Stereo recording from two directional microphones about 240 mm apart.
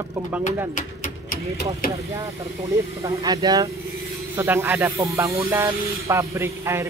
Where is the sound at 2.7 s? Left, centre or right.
Centre.